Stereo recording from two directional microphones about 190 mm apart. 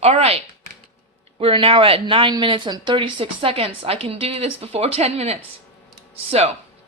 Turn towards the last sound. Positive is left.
turn(degrees=-35)  # may be behind; listen again after turning